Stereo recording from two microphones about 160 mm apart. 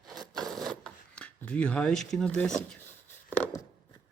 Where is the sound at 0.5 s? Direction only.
5° left (ahead or behind).